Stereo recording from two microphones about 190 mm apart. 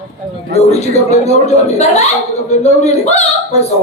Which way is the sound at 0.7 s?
35° left (ahead or behind).